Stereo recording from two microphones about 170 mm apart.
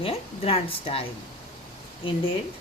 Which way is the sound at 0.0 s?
35° left (ahead or behind).